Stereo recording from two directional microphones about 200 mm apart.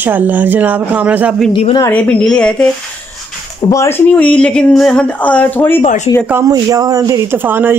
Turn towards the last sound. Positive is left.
turn(degrees=-10)  # may be behind; listen again after turning